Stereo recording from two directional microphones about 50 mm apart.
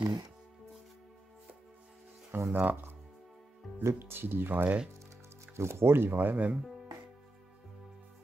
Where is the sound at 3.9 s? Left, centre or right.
Right.